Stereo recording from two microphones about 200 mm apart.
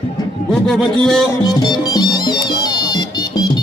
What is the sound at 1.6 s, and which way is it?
Music, 20° left (ahead or behind).